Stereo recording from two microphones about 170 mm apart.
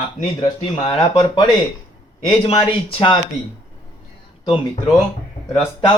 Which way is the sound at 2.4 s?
35° left (ahead or behind).